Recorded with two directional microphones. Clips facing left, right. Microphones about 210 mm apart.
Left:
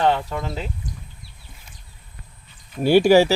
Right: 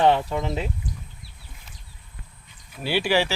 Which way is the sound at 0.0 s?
20° right (ahead or behind).